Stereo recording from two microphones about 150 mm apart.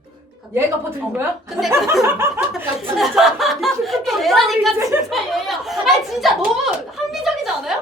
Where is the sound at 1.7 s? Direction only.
15° right (ahead or behind).